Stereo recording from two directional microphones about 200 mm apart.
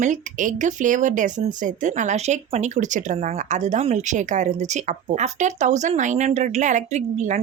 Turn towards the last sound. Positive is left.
turn(degrees=-35)  # may be behind; listen again after turning